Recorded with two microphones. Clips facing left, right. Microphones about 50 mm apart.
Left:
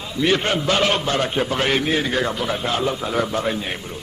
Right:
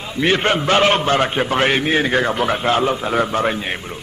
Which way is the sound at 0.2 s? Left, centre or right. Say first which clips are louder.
Right 3 dB; right.